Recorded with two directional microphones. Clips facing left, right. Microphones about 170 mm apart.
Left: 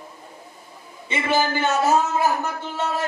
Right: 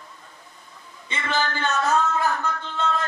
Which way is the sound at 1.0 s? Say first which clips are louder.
Left 5 dB; 15° left (ahead or behind).